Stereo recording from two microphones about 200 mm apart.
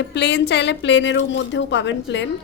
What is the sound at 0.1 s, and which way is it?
A woman's voice, 60° left (ahead or behind).